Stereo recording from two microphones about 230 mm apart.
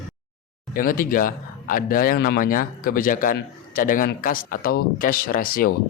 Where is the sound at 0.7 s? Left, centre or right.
Left.